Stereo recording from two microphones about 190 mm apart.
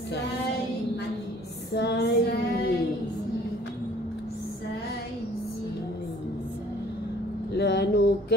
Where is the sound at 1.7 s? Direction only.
60° left (ahead or behind).